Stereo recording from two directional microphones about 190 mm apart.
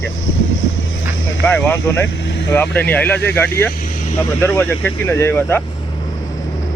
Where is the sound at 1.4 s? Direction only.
10° left (ahead or behind).